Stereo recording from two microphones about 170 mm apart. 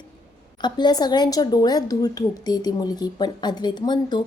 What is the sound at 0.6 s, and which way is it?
A woman's voice, 25° left (ahead or behind).